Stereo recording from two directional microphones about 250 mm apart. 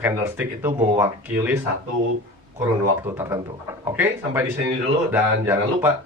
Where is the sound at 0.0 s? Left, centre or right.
Centre.